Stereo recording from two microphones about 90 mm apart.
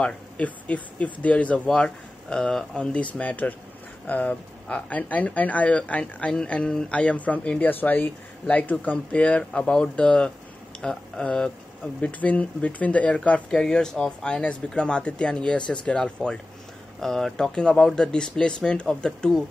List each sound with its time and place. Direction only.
0.0 s speech: 15° left (ahead or behind)